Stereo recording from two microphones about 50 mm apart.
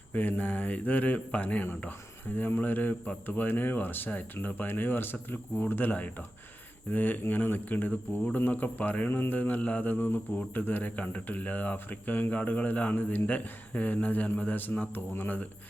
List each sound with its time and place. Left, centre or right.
0.1 s speech: left
5.9 s speech: left
9.0 s speech: left
10.9 s speech: left